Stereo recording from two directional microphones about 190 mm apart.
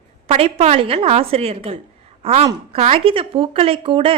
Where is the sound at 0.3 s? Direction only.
30° right (ahead or behind).